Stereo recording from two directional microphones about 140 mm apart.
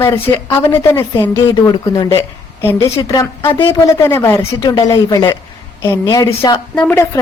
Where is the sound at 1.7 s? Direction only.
30° left (ahead or behind).